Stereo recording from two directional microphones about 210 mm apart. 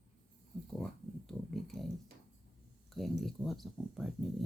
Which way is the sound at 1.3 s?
Centre (ahead or behind).